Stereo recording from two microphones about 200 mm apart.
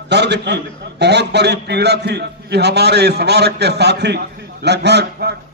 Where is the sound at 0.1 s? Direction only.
55° right (ahead or behind).